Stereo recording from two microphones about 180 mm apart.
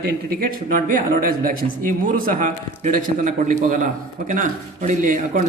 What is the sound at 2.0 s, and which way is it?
A man's voice, 45° right (ahead or behind).